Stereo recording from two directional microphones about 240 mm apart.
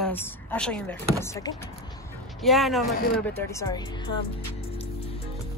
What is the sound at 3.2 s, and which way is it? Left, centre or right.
Speech, centre.